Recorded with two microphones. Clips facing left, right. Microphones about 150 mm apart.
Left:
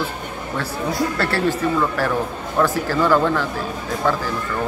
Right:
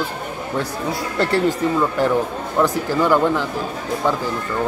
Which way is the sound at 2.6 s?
15° right (ahead or behind).